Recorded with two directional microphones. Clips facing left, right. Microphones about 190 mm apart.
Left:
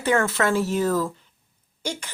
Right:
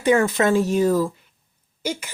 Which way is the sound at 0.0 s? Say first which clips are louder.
Right 4 dB; 15° right (ahead or behind).